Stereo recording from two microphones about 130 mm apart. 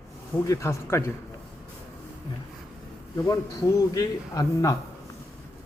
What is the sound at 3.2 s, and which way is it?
A man's voice, 30° left (ahead or behind).